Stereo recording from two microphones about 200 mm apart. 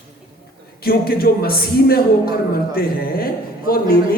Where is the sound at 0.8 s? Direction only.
50° left (ahead or behind).